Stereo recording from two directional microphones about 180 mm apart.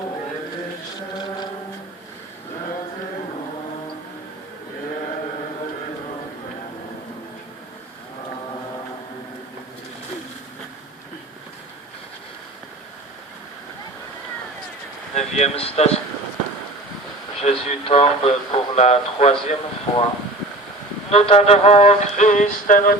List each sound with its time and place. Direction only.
15.1 s speech: 40° left (ahead or behind)
17.4 s speech: 35° left (ahead or behind)
21.1 s speech: 35° left (ahead or behind)